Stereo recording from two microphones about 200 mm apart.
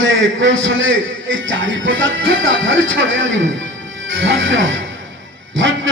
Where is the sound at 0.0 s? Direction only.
70° right (ahead or behind).